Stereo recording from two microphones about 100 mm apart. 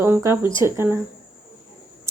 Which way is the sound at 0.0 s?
25° right (ahead or behind).